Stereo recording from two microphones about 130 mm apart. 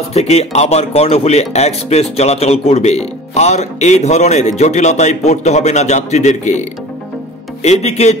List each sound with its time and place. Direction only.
0.1 s speech: 55° left (ahead or behind)
7.6 s speech: 60° left (ahead or behind)